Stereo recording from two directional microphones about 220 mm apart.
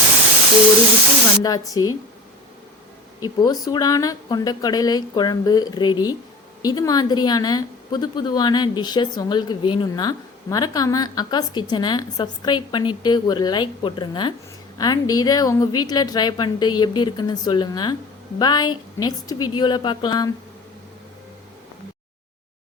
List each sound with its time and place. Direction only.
1.5 s speech: 15° left (ahead or behind)
3.2 s a woman's voice: 20° left (ahead or behind)